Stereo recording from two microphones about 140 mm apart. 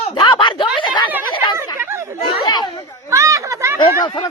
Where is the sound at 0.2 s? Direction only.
35° left (ahead or behind).